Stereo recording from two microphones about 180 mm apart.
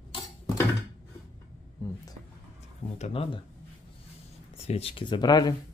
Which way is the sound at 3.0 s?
30° left (ahead or behind).